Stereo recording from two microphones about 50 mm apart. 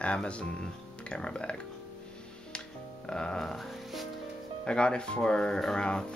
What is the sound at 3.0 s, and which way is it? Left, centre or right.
Speech, centre.